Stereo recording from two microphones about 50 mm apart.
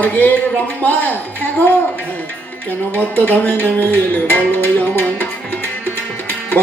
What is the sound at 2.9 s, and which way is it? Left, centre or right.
Music, left.